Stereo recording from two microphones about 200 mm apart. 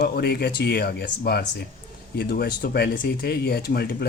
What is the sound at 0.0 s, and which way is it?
Speech, 55° left (ahead or behind).